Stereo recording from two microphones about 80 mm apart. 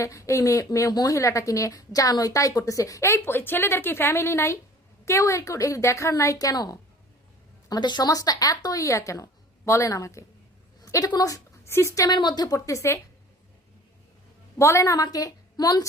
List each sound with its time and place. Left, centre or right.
0.0 s a woman's voice: left
7.7 s speech: left
8.1 s a woman's voice: left
10.8 s a sound: left
11.6 s speech: left
12.0 s speech: left
12.5 s a woman's voice: left
14.6 s a woman's voice: left